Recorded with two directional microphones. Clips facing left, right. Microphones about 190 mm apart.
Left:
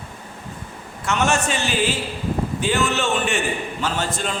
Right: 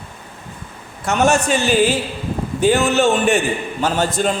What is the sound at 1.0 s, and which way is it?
A man's voice, 40° right (ahead or behind).